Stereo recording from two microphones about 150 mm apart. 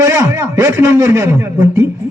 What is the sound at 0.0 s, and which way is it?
A man's voice, 20° right (ahead or behind).